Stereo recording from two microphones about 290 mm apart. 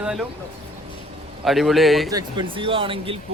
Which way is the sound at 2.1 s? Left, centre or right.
Centre.